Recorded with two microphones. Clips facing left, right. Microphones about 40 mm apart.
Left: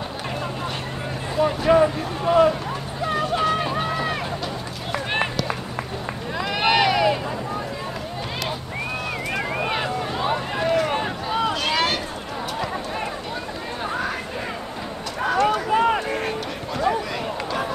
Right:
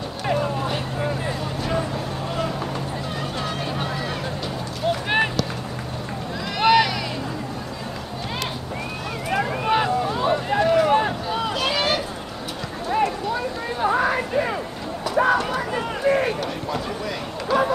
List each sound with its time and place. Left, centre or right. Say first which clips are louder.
0.3 s vehicle: right 8 dB; centre
1.7 s a sound: left 8 dB; left
3.2 s vehicle: left 9 dB; centre
5.1 s run: right 1 dB; centre
6.6 s vehicle: right 1 dB; centre
9.7 s boat: right 4 dB; centre
11.5 s a sound: even; centre
13.8 s a sound: right 7 dB; centre
15.7 s run: left 8 dB; left
16.1 s run: right 5 dB; centre